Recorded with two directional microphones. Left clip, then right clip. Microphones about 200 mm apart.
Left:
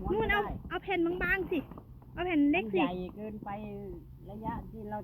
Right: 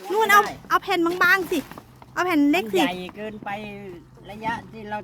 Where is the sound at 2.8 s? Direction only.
30° right (ahead or behind).